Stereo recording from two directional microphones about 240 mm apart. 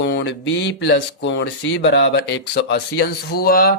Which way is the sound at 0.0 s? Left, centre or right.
Left.